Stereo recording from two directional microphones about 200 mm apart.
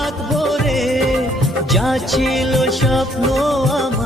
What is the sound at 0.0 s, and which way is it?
Music, centre (ahead or behind).